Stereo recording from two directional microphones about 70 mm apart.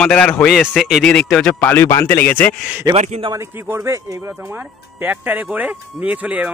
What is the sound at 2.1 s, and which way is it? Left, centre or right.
Speech, left.